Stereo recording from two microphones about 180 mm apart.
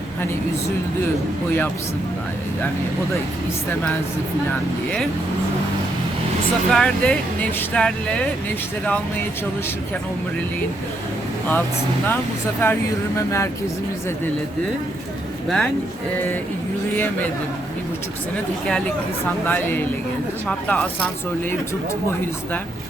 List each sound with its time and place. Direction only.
6.7 s speech: 5° left (ahead or behind)
12.6 s speech: 15° left (ahead or behind)
15.4 s speech: centre (ahead or behind)
19.5 s speech: 10° left (ahead or behind)